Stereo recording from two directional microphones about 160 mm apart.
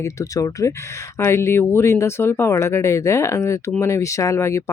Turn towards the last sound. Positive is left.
turn(degrees=15)  # may be behind; listen again after turning